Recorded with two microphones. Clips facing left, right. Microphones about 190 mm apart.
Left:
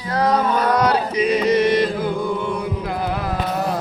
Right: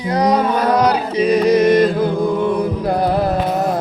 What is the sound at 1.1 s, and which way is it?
Chant, 35° right (ahead or behind).